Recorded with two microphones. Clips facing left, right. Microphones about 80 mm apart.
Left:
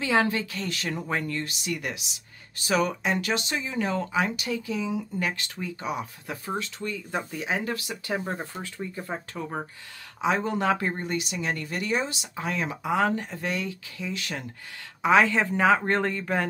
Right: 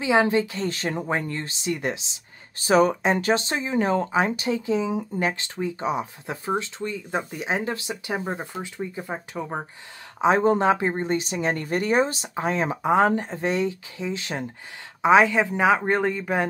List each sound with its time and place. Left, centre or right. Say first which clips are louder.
0.0 s speech: right 4 dB; centre
10.2 s speech: right 6 dB; right
10.7 s a woman's voice: right 4 dB; right